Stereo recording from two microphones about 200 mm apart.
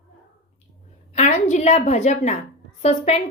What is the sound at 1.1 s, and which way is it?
A woman's voice, 35° left (ahead or behind).